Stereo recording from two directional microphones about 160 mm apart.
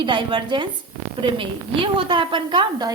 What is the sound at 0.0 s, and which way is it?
A woman's voice, 30° right (ahead or behind).